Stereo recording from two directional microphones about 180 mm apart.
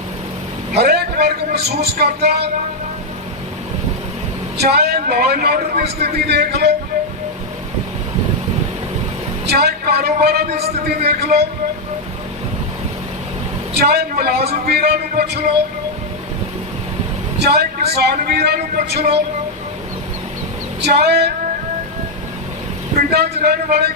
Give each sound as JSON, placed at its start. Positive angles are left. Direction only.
{"t": 0.8, "sound": "a man's voice", "side_deg": -60}
{"t": 4.5, "sound": "a man's voice", "side_deg": -60}
{"t": 9.5, "sound": "a man's voice", "side_deg": -65}
{"t": 13.7, "sound": "a man's voice", "side_deg": -60}
{"t": 17.4, "sound": "a man's voice", "side_deg": -65}
{"t": 20.8, "sound": "a man's voice", "side_deg": -65}
{"t": 23.1, "sound": "a man's voice", "side_deg": -60}